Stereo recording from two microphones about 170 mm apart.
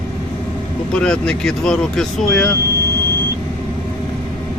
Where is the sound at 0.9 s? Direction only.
5° left (ahead or behind).